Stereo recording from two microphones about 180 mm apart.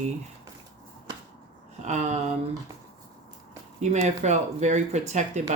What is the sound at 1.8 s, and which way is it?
Speech, 40° right (ahead or behind).